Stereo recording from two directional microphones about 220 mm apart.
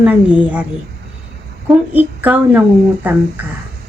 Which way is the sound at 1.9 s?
5° right (ahead or behind).